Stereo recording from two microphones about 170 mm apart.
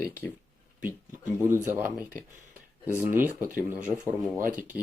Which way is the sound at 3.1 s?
10° right (ahead or behind).